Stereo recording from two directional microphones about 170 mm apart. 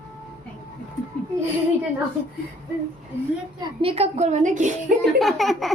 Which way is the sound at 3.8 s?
35° right (ahead or behind).